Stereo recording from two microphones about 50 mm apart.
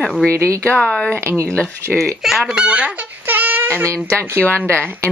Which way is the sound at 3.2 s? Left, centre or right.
Right.